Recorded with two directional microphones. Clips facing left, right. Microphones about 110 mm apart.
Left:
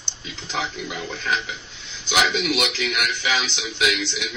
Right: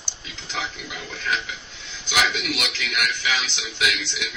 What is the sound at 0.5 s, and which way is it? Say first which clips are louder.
Speech: left 4 dB; 30° left (ahead or behind).